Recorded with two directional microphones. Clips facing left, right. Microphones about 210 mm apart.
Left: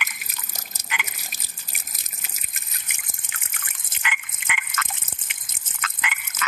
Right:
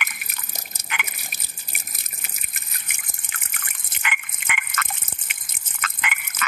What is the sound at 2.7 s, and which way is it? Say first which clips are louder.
Drip: right 2 dB; 60° right (ahead or behind).